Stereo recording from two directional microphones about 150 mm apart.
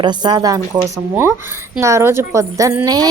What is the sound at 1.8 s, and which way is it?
Speech, 20° right (ahead or behind).